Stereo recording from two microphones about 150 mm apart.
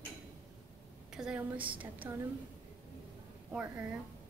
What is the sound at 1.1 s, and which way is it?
A woman's voice, 5° right (ahead or behind).